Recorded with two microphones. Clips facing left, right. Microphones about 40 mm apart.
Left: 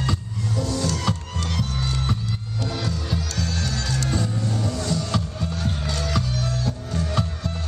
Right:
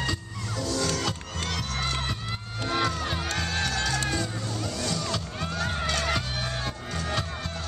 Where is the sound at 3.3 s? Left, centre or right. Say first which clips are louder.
Even; right.